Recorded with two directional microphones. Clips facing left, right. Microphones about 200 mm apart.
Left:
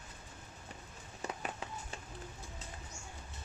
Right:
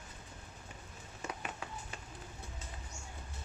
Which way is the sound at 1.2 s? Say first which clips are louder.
Left 1 dB; 35° left (ahead or behind).